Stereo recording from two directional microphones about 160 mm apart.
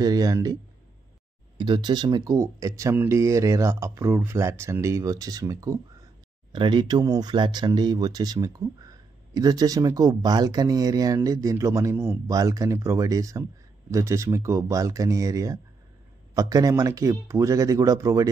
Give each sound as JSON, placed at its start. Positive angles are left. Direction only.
{"t": 0.0, "sound": "speech", "side_deg": -25}
{"t": 1.6, "sound": "speech", "side_deg": -30}